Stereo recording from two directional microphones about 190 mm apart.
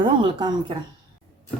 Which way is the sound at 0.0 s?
25° right (ahead or behind).